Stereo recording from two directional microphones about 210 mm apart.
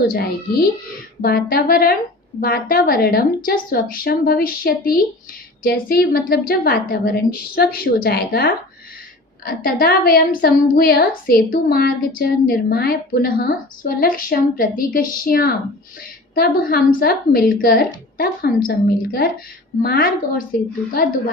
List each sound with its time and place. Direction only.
0.0 s a woman's voice: 45° left (ahead or behind)